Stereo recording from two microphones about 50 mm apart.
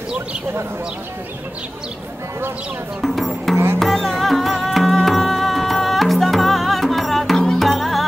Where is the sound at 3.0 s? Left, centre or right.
Centre.